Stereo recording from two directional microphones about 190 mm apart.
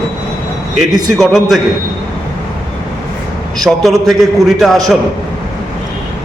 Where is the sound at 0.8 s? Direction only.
Centre (ahead or behind).